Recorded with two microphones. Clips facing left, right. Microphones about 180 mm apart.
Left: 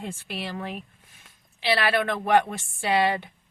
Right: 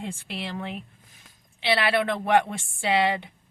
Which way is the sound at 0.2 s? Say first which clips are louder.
Even; 25° right (ahead or behind).